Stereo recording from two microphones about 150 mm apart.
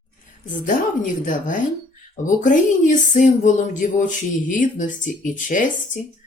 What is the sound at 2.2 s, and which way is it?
Speech, 60° left (ahead or behind).